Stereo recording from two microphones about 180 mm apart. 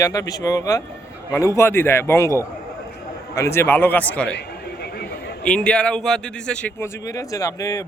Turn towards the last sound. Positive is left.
turn(degrees=20)  # may be behind; listen again after turning